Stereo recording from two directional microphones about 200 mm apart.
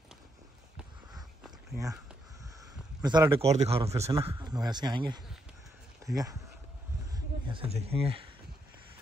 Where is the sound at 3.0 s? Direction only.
20° right (ahead or behind).